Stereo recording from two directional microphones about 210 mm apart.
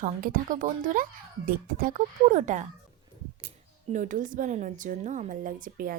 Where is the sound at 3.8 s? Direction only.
35° right (ahead or behind).